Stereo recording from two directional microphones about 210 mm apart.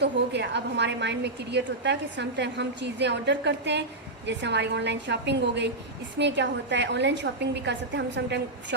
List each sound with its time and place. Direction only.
0.0 s a woman's voice: 55° right (ahead or behind)